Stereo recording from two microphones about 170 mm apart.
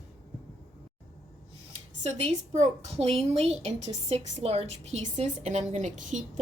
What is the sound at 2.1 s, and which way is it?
A woman's voice, 40° right (ahead or behind).